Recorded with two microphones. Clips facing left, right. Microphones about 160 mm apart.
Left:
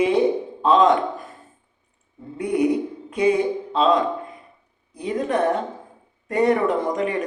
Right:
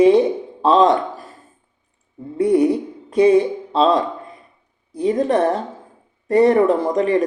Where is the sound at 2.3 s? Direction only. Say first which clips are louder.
Right 5 dB; 35° right (ahead or behind).